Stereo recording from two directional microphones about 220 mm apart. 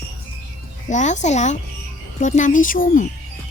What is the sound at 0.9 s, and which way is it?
A woman's voice, 35° left (ahead or behind).